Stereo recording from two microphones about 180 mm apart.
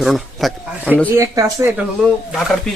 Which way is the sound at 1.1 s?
20° right (ahead or behind).